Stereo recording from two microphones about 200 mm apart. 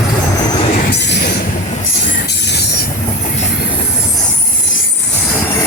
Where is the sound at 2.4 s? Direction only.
60° left (ahead or behind).